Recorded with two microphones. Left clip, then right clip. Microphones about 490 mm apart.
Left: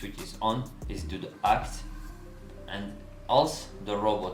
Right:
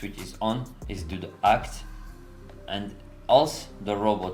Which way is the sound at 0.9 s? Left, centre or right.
Right.